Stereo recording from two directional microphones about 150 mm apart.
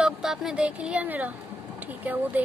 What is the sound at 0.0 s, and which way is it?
Speech, 5° right (ahead or behind).